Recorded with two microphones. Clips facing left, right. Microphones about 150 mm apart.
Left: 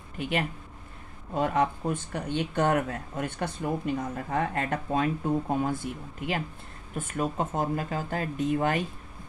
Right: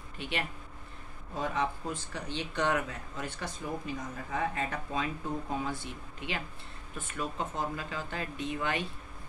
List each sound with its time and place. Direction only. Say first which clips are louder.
1.3 s speech: left 7 dB; 60° left (ahead or behind)